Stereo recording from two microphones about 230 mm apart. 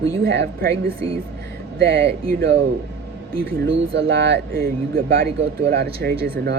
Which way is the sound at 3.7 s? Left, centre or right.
Right.